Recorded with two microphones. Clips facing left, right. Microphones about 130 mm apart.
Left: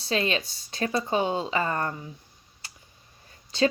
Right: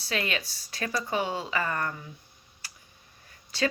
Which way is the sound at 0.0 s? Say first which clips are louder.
Left 5 dB; 25° left (ahead or behind).